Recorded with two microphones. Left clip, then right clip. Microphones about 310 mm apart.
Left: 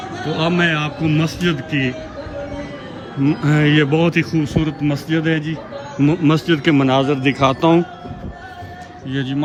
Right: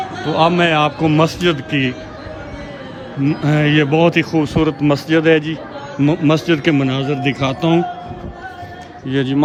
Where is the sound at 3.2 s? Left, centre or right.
Centre.